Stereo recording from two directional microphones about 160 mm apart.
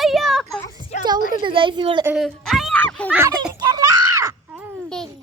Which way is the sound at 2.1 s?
Centre (ahead or behind).